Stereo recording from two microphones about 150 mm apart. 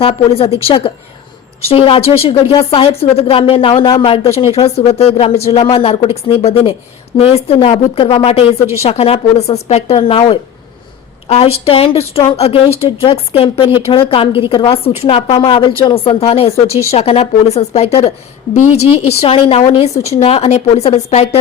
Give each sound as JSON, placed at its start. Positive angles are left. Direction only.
{"t": 0.0, "sound": "a woman's voice", "side_deg": 40}